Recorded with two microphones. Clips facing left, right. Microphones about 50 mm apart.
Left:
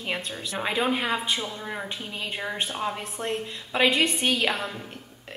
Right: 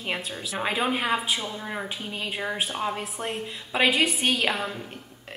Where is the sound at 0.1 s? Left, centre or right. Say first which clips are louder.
Even; centre.